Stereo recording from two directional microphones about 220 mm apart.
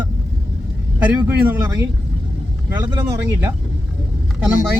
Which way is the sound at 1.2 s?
10° right (ahead or behind).